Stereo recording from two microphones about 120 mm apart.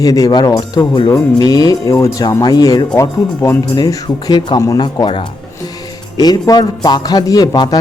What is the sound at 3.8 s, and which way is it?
A man's voice, 35° left (ahead or behind).